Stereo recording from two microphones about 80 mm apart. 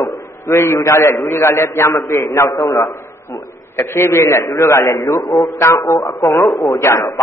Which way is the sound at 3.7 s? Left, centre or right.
Left.